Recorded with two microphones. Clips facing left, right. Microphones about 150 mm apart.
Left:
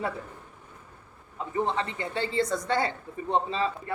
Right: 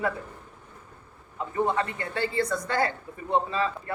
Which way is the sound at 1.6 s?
25° left (ahead or behind).